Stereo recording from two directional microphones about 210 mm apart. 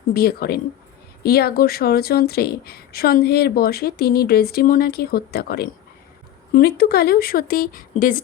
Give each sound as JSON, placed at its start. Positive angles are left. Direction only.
{"t": 0.1, "sound": "speech", "side_deg": 45}